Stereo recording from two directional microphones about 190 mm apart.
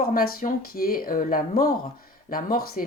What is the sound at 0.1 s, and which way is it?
Speech, 50° left (ahead or behind).